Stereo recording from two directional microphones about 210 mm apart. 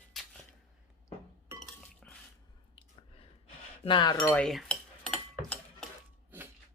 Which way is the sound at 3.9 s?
20° left (ahead or behind).